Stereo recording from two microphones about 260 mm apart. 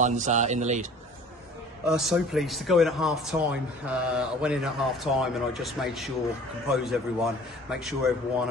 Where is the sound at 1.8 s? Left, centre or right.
Centre.